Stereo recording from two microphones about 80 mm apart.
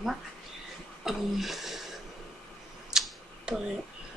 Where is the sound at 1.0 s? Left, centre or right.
Centre.